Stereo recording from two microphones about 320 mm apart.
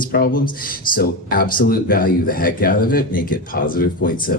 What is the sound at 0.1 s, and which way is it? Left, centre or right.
Speech, left.